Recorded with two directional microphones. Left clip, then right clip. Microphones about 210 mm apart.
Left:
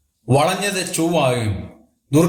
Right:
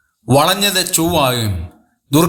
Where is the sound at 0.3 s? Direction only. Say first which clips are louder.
Right 4 dB; 45° right (ahead or behind).